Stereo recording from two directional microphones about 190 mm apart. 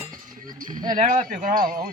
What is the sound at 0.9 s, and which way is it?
Speech, 45° right (ahead or behind).